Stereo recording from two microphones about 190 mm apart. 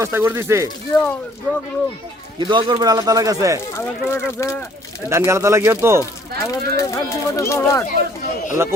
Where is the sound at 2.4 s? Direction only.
25° right (ahead or behind).